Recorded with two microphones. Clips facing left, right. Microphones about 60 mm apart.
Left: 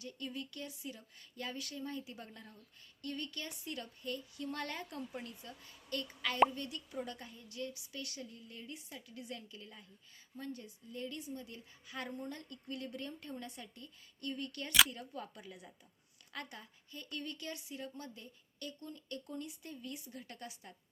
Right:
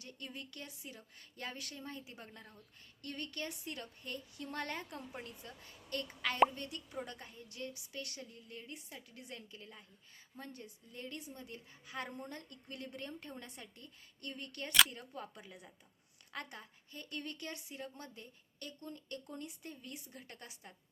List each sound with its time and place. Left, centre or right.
0.3 s a woman's voice: right